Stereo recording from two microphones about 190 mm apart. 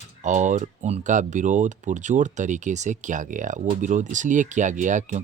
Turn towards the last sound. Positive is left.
turn(degrees=-40)  # may be behind; listen again after turning